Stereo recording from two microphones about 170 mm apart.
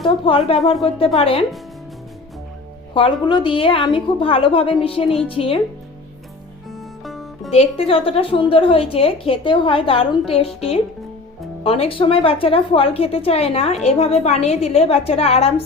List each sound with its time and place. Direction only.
0.3 s a woman's voice: 35° left (ahead or behind)
2.9 s a woman's voice: 30° left (ahead or behind)
6.7 s music: centre (ahead or behind)
7.5 s a woman's voice: 35° left (ahead or behind)
11.6 s a woman's voice: 35° left (ahead or behind)